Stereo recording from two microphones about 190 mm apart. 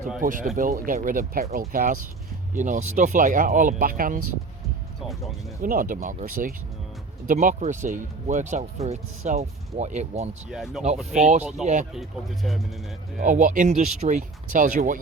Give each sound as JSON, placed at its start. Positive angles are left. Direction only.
{"t": 0.2, "sound": "speech", "side_deg": -45}
{"t": 5.6, "sound": "speech", "side_deg": -45}
{"t": 7.3, "sound": "speech", "side_deg": -40}
{"t": 10.5, "sound": "speech", "side_deg": 0}
{"t": 11.6, "sound": "speech", "side_deg": -40}
{"t": 11.9, "sound": "speech", "side_deg": 0}
{"t": 13.1, "sound": "speech", "side_deg": -45}